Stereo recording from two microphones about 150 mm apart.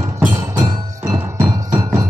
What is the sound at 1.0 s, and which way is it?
Music, 20° right (ahead or behind).